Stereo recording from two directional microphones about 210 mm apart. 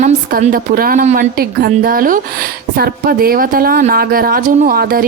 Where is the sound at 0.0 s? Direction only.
40° right (ahead or behind).